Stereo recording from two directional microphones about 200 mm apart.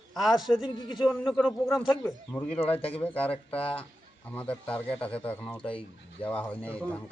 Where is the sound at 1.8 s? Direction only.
15° left (ahead or behind).